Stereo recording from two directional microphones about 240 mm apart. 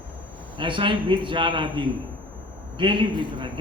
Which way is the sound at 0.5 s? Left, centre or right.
Right.